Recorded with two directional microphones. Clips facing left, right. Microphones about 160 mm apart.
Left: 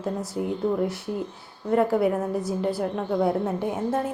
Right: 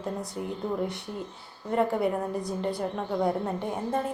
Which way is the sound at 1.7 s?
Centre (ahead or behind).